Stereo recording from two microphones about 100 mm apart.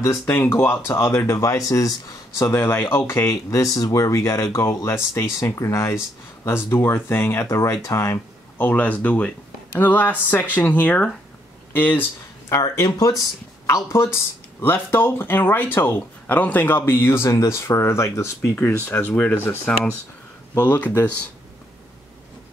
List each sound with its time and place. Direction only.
0.4 s speech: 25° left (ahead or behind)
11.7 s a sound: 15° left (ahead or behind)
12.5 s speech: 30° left (ahead or behind)